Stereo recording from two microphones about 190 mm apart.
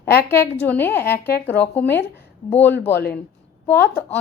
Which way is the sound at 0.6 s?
10° left (ahead or behind).